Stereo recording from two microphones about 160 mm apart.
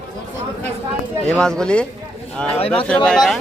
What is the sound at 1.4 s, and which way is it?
A man's voice, 5° left (ahead or behind).